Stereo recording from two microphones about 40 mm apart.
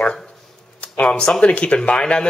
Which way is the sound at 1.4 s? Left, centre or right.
Left.